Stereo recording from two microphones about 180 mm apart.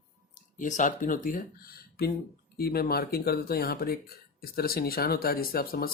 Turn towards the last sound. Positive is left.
turn(degrees=55)  # may be behind; listen again after turning